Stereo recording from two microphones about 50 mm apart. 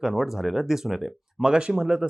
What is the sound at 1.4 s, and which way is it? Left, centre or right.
Speech, centre.